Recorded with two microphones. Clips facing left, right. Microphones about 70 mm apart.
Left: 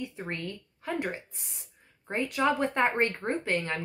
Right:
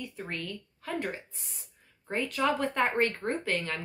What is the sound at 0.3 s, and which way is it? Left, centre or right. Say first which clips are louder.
A woman's voice: left 1 dB; left.